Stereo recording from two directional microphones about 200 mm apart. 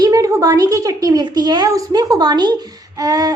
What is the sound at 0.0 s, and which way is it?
A child's voice, 15° right (ahead or behind).